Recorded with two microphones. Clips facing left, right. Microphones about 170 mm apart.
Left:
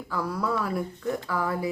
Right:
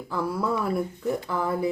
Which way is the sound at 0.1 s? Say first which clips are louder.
Right 2 dB; 25° right (ahead or behind).